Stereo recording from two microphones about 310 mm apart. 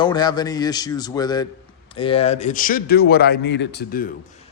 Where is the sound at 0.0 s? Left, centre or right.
Centre; by 4.1 s left.